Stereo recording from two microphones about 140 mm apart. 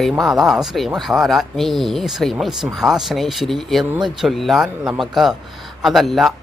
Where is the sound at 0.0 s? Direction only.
Centre (ahead or behind).